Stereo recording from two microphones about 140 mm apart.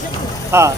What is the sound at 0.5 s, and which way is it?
Speech, 20° right (ahead or behind).